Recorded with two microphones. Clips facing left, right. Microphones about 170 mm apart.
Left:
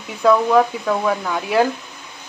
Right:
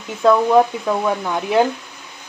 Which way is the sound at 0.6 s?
15° right (ahead or behind).